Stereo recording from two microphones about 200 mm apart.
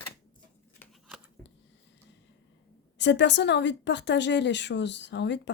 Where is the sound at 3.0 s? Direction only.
60° left (ahead or behind).